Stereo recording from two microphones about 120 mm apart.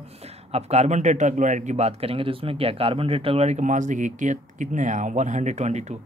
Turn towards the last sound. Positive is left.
turn(degrees=-70)  # may be behind; listen again after turning